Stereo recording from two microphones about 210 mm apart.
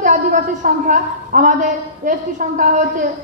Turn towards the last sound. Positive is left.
turn(degrees=-40)  # may be behind; listen again after turning